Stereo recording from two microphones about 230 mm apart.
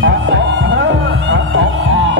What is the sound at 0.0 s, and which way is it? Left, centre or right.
Music, right.